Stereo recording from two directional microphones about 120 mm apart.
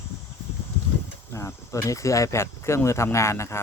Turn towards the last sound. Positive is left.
turn(degrees=25)  # may be behind; listen again after turning